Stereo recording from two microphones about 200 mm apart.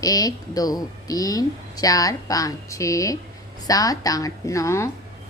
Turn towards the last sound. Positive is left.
turn(degrees=15)  # may be behind; listen again after turning